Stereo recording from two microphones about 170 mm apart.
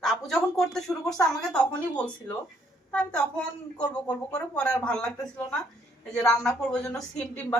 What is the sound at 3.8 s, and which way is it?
Speech, 25° left (ahead or behind).